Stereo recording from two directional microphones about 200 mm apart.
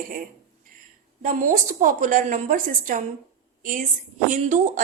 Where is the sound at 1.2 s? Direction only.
40° right (ahead or behind).